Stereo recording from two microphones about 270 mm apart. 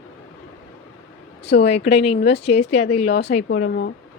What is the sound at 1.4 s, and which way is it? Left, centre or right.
Speech, left.